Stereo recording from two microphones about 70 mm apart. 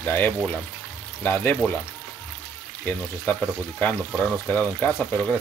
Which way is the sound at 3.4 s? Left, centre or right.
Left.